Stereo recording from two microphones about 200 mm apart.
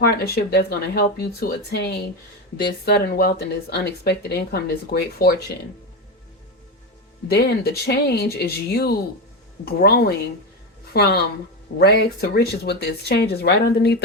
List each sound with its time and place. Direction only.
0.0 s speech: 50° left (ahead or behind)
7.3 s speech: 55° left (ahead or behind)